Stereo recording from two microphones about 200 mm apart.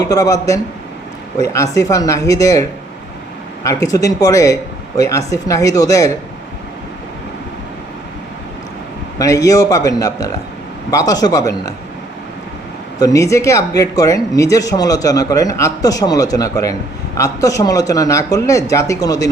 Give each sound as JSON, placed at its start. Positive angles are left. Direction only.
{"t": 0.0, "sound": "speech", "side_deg": 15}
{"t": 9.1, "sound": "speech", "side_deg": 15}
{"t": 13.0, "sound": "speech", "side_deg": 15}